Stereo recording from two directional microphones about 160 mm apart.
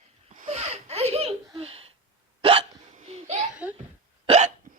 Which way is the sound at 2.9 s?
45° right (ahead or behind).